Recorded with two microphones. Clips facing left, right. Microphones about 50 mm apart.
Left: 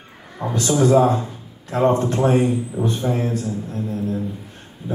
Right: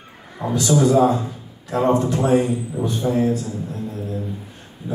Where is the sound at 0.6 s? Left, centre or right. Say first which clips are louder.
Even; left.